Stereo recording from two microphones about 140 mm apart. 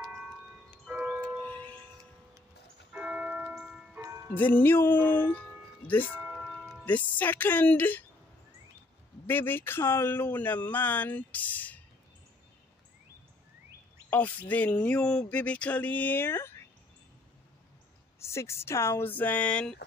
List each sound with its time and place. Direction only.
0.0 s a sound: 5° right (ahead or behind)
1.4 s music: 10° left (ahead or behind)
2.9 s church bell: 5° right (ahead or behind)
4.0 s music: 20° right (ahead or behind)
4.3 s speech: 10° left (ahead or behind)
6.1 s tubular bells: 10° right (ahead or behind)
6.8 s speech: 10° left (ahead or behind)
9.3 s speech: 15° left (ahead or behind)
14.5 s speech: 10° left (ahead or behind)
18.2 s speech: 20° left (ahead or behind)